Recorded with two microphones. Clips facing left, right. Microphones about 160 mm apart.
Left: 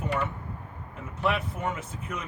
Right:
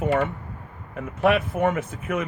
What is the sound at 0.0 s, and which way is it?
Speech, 90° right.